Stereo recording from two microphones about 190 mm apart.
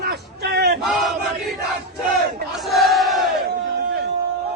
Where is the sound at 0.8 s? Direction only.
Centre (ahead or behind).